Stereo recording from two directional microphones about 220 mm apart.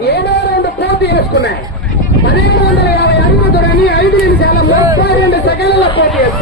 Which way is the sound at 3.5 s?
45° left (ahead or behind).